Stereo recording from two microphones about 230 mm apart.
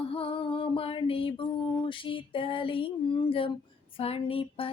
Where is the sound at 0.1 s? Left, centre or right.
Left.